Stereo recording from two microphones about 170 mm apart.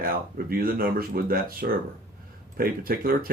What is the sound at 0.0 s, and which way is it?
Speech, 60° right (ahead or behind).